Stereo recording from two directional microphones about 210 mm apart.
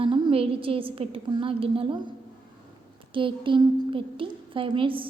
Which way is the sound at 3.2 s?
25° right (ahead or behind).